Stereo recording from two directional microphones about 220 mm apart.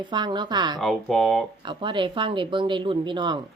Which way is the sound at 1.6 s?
20° right (ahead or behind).